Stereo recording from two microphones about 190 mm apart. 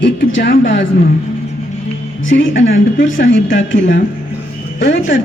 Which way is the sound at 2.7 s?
70° left (ahead or behind).